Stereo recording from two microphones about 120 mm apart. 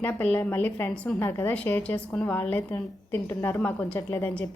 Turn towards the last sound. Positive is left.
turn(degrees=15)  # may be behind; listen again after turning